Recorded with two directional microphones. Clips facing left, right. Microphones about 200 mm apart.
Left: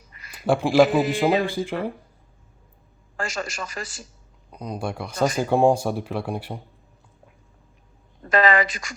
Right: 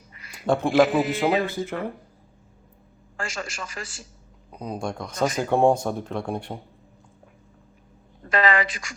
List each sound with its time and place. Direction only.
0.2 s a sound: 40° left (ahead or behind)
0.4 s speech: 5° left (ahead or behind)
1.5 s speech: 15° left (ahead or behind)
3.2 s a woman's voice: 40° left (ahead or behind)
4.5 s speech: 5° right (ahead or behind)
4.8 s speech: 5° left (ahead or behind)
8.3 s a woman's voice: 40° left (ahead or behind)